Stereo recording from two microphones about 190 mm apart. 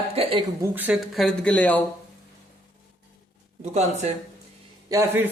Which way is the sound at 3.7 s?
35° right (ahead or behind).